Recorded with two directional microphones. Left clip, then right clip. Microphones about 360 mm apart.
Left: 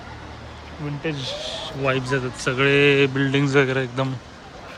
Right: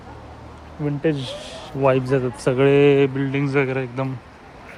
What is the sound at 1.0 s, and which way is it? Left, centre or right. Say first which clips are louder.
A man's voice: right 3 dB; right.